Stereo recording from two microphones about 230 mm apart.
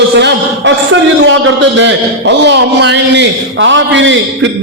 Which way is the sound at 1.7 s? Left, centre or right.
Right.